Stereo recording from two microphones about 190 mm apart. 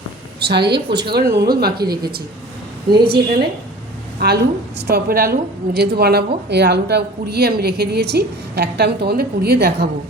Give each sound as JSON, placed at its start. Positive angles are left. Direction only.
{"t": 0.3, "sound": "a woman's voice", "side_deg": -60}
{"t": 4.2, "sound": "a woman's voice", "side_deg": -60}